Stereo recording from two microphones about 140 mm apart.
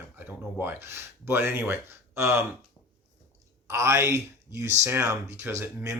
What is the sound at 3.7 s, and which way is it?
Speech, 20° right (ahead or behind).